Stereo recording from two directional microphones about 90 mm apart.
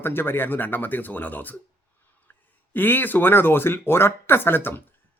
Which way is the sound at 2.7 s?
20° left (ahead or behind).